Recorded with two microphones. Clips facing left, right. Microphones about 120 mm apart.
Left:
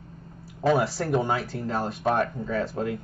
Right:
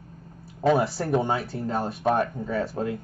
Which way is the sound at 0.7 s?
25° right (ahead or behind).